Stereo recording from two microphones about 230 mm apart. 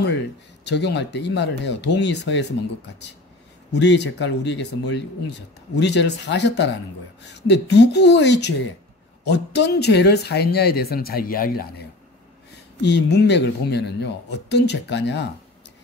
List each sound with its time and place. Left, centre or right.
0.7 s speech: left
3.7 s speech: left